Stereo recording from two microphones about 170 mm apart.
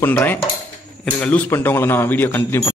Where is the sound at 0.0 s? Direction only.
10° left (ahead or behind).